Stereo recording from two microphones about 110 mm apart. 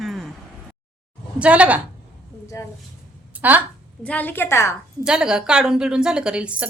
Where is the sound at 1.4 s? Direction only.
10° right (ahead or behind).